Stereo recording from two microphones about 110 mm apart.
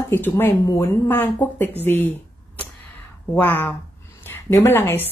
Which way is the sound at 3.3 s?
15° left (ahead or behind).